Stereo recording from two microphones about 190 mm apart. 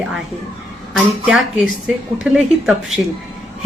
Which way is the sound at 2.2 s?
5° right (ahead or behind).